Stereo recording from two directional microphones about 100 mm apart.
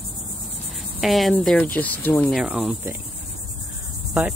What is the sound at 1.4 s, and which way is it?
Speech, 5° left (ahead or behind).